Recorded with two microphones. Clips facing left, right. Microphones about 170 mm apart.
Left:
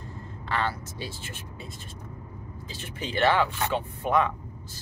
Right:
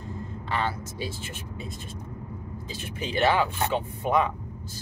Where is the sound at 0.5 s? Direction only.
15° right (ahead or behind).